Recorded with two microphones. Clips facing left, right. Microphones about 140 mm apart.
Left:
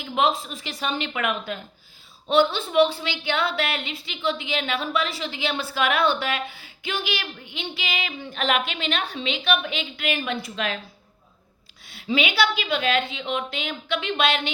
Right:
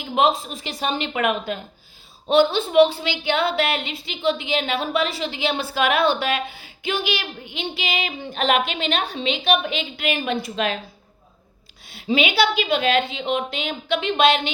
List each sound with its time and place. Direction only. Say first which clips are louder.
0.2 s a woman's voice: right 3 dB; 20° right (ahead or behind)
12.0 s a woman's voice: right 3 dB; 15° right (ahead or behind)